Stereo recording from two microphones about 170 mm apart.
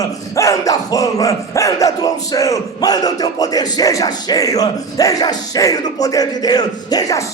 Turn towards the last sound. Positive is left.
turn(degrees=20)  # may be behind; listen again after turning